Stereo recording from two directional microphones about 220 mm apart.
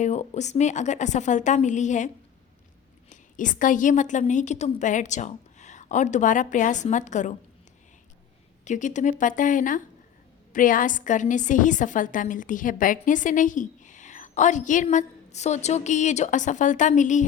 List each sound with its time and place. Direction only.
0.0 s a woman's voice: 30° left (ahead or behind)
3.1 s a woman's voice: 35° left (ahead or behind)
8.6 s a woman's voice: 35° left (ahead or behind)